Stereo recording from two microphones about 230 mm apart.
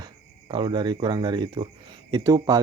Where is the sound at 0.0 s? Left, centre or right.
Centre.